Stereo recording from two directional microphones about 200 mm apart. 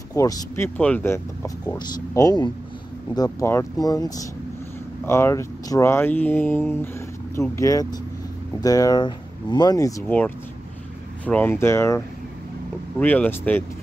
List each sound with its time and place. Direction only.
0.1 s speech: 15° left (ahead or behind)
13.0 s speech: 10° left (ahead or behind)